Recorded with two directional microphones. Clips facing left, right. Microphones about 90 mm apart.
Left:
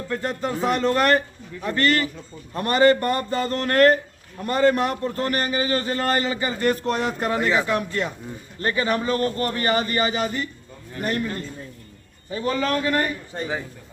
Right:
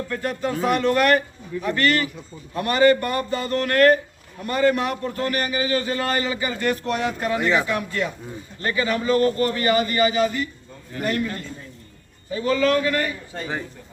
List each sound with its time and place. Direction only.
0.1 s a man's voice: 30° left (ahead or behind)